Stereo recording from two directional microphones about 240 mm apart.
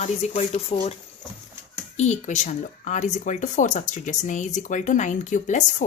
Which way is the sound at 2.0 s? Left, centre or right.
Left.